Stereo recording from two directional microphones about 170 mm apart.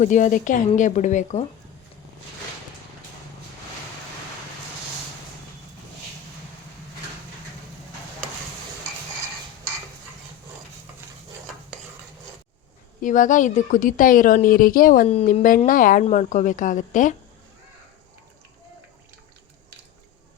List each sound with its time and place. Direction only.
0.0 s a woman's voice: 50° left (ahead or behind)
13.0 s a woman's voice: 50° left (ahead or behind)
15.0 s a woman's voice: 40° left (ahead or behind)